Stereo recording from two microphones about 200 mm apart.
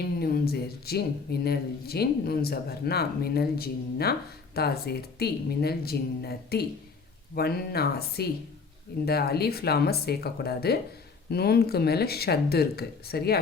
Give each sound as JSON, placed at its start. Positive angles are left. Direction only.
{"t": 0.0, "sound": "speech", "side_deg": 50}